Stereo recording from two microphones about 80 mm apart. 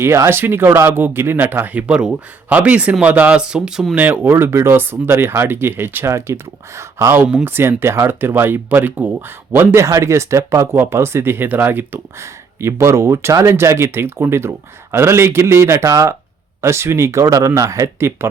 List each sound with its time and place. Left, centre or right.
0.0 s speech: right; by 3.8 s centre
3.9 s speech: right
12.2 s speech: right